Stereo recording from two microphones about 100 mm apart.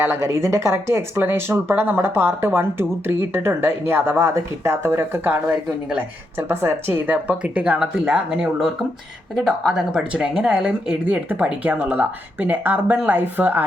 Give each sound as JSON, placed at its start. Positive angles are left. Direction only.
{"t": 0.0, "sound": "speech", "side_deg": -25}